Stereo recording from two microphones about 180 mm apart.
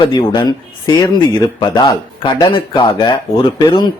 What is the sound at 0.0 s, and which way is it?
Speech, 25° left (ahead or behind).